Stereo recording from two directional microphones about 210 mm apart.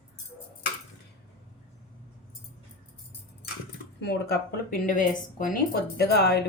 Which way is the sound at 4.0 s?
50° left (ahead or behind).